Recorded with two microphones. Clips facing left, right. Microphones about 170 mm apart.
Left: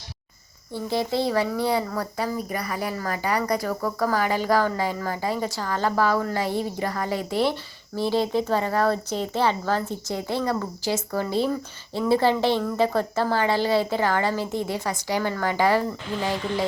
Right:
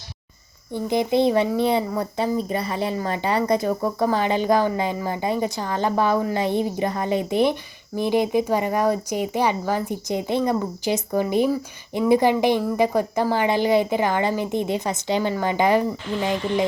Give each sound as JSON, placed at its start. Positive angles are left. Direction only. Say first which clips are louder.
{"t": 0.7, "sound": "a woman's voice", "louder": "right 4 dB", "side_deg": -20}